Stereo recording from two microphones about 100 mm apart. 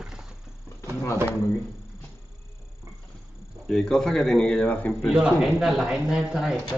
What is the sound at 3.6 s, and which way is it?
A man's voice, 5° left (ahead or behind).